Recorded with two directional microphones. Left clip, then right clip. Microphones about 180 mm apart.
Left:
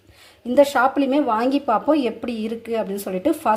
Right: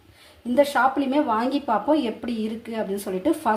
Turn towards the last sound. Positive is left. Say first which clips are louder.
# left 3 dB
turn(degrees=35)  # may be behind; listen again after turning